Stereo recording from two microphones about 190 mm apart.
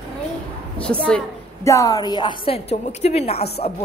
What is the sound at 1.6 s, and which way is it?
A woman's voice, 15° left (ahead or behind).